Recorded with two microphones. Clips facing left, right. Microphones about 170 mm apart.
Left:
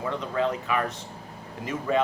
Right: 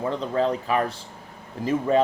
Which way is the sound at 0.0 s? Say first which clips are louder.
Right 3 dB; 30° right (ahead or behind).